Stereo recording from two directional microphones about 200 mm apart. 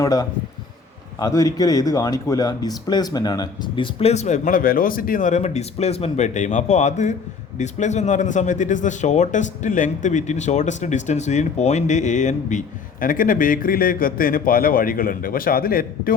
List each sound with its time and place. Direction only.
0.0 s speech: 20° left (ahead or behind); by 16.1 s 45° left (ahead or behind)